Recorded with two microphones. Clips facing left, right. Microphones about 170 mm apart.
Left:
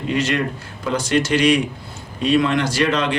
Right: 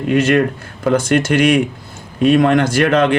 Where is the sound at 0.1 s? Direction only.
50° right (ahead or behind).